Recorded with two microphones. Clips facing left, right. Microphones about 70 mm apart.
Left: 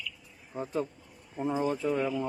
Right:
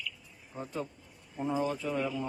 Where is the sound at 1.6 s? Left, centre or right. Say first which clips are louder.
Left 4 dB; left.